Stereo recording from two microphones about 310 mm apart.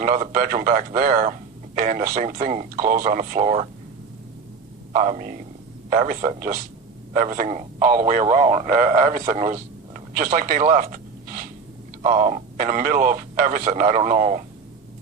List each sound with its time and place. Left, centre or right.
0.0 s speech: right
4.9 s a man's voice: right